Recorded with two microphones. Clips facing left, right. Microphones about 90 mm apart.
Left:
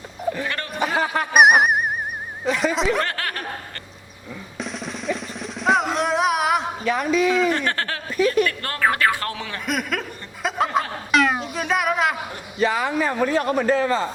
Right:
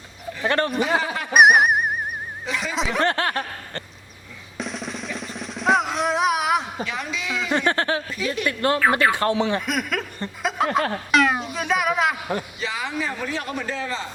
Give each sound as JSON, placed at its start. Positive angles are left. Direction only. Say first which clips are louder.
{"t": 0.4, "sound": "a man's voice", "louder": "right 7 dB", "side_deg": -35}
{"t": 0.8, "sound": "a man's voice", "louder": "left 1 dB", "side_deg": 45}
{"t": 1.3, "sound": "music", "louder": "even", "side_deg": 0}
{"t": 2.7, "sound": "snicker", "louder": "left 4 dB", "side_deg": 0}
{"t": 3.0, "sound": "speech", "louder": "right 4 dB", "side_deg": -25}
{"t": 4.5, "sound": "music", "louder": "right 1 dB", "side_deg": 0}
{"t": 6.8, "sound": "a man's voice", "louder": "left 10 dB", "side_deg": 45}
{"t": 7.5, "sound": "speech", "louder": "right 3 dB", "side_deg": -20}
{"t": 8.1, "sound": "a man's voice", "louder": "left 8 dB", "side_deg": 45}
{"t": 8.4, "sound": "speech", "louder": "right 3 dB", "side_deg": -20}
{"t": 9.6, "sound": "snicker", "louder": "even", "side_deg": 0}
{"t": 12.5, "sound": "a man's voice", "louder": "left 7 dB", "side_deg": 50}